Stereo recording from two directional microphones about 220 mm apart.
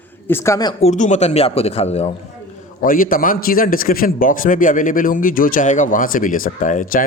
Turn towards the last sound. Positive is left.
turn(degrees=35)  # may be behind; listen again after turning